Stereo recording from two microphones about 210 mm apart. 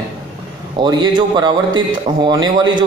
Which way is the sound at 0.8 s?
20° right (ahead or behind).